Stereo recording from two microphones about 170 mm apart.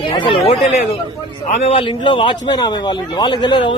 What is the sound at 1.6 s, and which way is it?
A man's voice, 35° left (ahead or behind).